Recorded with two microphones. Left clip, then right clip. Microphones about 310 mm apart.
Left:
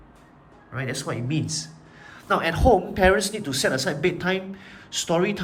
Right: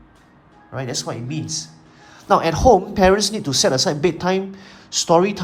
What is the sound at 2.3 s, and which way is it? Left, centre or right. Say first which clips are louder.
Speech: right 6 dB; centre.